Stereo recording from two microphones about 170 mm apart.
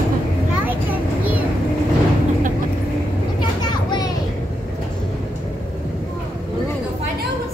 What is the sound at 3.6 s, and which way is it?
Children playing, 25° left (ahead or behind).